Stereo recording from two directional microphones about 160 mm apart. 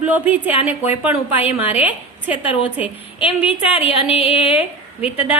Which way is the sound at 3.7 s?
35° left (ahead or behind).